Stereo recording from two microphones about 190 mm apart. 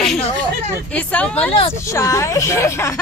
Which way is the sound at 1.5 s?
30° left (ahead or behind).